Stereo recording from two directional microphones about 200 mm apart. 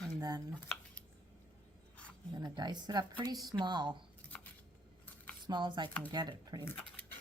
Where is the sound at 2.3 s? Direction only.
20° right (ahead or behind).